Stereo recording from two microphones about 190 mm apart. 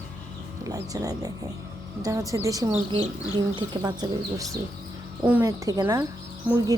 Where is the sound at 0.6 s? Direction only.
20° right (ahead or behind).